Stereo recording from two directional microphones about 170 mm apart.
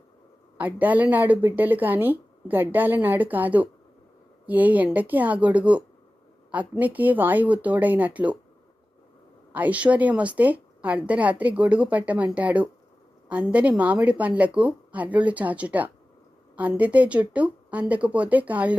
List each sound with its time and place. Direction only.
0.5 s a woman's voice: 10° right (ahead or behind)
9.5 s a woman's voice: 10° right (ahead or behind)